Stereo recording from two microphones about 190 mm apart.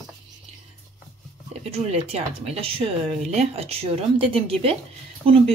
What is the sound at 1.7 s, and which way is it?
Speech, 30° right (ahead or behind).